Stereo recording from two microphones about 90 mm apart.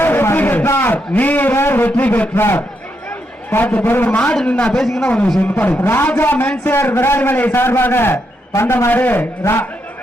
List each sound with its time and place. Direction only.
0.0 s a man's voice: 25° left (ahead or behind)
4.7 s a man's voice: 5° left (ahead or behind)
5.0 s a man's voice: 15° left (ahead or behind)